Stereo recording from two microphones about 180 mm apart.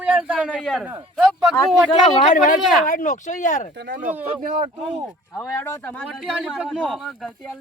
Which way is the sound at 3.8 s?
60° right (ahead or behind).